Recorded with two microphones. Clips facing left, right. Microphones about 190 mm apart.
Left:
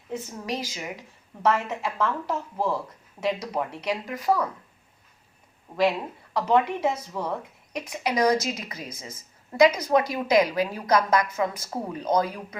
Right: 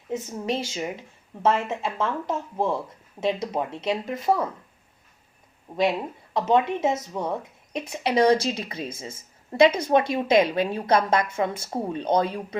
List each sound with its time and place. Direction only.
0.1 s a woman's voice: 25° right (ahead or behind)
6.3 s a woman's voice: 25° right (ahead or behind)